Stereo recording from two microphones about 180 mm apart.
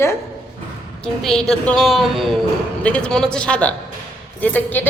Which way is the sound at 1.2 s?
Centre (ahead or behind).